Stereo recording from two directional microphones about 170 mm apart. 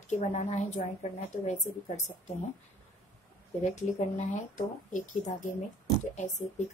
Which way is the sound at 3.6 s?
40° left (ahead or behind).